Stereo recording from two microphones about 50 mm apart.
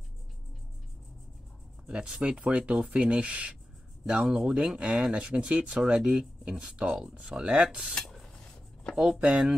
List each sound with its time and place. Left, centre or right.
1.9 s speech: centre
4.1 s speech: centre
8.9 s speech: centre